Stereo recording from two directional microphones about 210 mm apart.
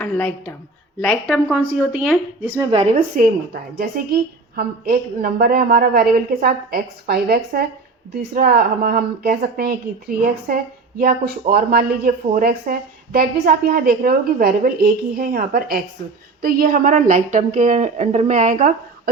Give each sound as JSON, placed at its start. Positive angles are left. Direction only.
{"t": 0.0, "sound": "a woman's voice", "side_deg": 10}
{"t": 2.6, "sound": "a woman's voice", "side_deg": -25}